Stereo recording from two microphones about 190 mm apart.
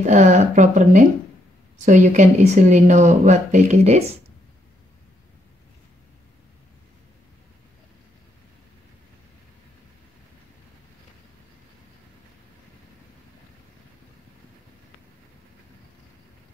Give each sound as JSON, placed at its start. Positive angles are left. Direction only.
{"t": 0.0, "sound": "speech", "side_deg": -40}